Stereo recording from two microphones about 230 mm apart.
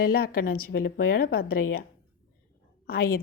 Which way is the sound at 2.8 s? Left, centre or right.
Left.